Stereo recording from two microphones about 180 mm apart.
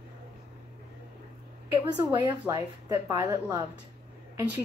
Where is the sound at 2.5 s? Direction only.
20° right (ahead or behind).